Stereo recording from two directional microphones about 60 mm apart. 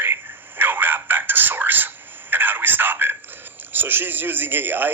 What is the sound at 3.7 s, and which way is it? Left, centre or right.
Speech, right.